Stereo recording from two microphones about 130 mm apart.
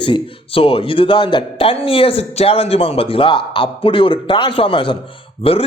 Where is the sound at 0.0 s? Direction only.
45° left (ahead or behind).